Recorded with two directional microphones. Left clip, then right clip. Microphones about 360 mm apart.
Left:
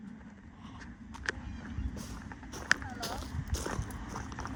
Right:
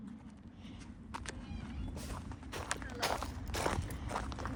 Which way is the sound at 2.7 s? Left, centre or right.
Centre.